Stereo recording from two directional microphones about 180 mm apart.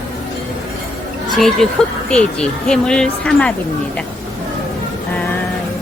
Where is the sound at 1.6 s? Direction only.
5° left (ahead or behind).